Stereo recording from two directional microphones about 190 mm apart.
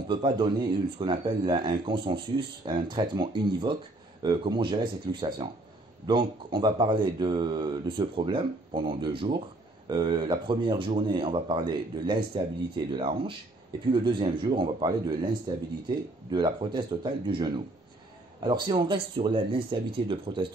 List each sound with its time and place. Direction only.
0.1 s speech: 25° right (ahead or behind)